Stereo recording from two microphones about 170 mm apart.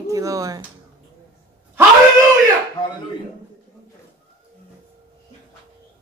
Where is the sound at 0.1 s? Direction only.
20° right (ahead or behind).